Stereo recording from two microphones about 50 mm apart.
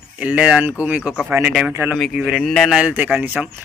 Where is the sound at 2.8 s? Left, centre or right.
Centre.